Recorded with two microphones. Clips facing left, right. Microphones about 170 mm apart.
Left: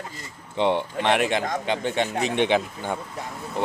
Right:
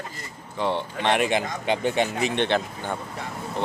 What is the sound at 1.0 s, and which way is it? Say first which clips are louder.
Speech: right 2 dB; centre (ahead or behind).